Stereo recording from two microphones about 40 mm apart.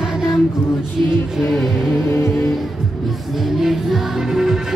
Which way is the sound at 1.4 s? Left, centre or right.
Centre.